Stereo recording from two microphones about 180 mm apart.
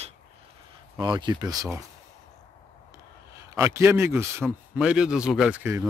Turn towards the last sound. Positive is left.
turn(degrees=-10)  # may be behind; listen again after turning